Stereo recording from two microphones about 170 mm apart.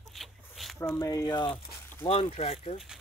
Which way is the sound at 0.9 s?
15° left (ahead or behind).